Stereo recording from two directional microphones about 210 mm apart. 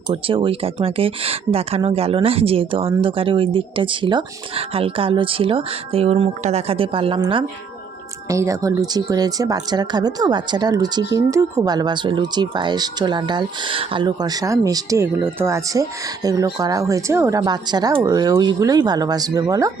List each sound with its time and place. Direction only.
0.1 s speech: 25° right (ahead or behind)